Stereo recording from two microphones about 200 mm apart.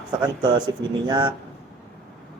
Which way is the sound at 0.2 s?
20° right (ahead or behind).